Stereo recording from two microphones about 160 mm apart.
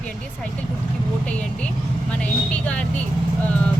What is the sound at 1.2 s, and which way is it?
Vehicle, 5° left (ahead or behind).